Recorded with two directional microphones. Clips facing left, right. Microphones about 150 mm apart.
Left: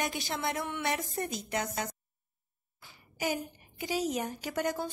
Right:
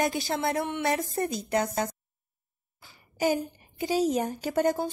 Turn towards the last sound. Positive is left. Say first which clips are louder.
# right 7 dB
turn(degrees=-30)  # may be behind; listen again after turning